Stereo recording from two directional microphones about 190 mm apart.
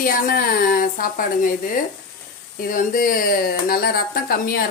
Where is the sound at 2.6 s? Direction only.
50° left (ahead or behind).